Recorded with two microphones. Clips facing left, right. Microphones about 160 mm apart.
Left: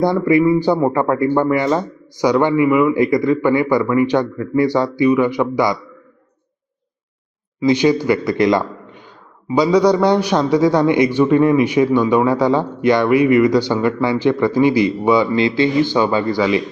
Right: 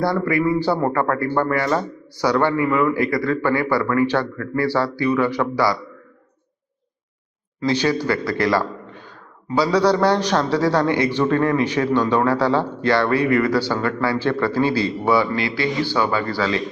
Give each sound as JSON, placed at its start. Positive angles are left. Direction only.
{"t": 0.0, "sound": "speech", "side_deg": 20}
{"t": 7.6, "sound": "a man's voice", "side_deg": 15}